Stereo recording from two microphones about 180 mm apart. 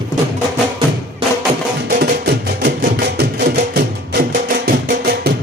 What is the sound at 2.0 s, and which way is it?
Music, 60° right (ahead or behind).